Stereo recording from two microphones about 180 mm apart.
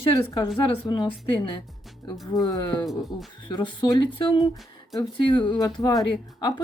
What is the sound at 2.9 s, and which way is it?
Speech, centre (ahead or behind).